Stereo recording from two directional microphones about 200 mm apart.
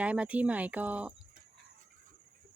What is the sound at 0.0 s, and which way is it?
A woman's voice, 5° right (ahead or behind).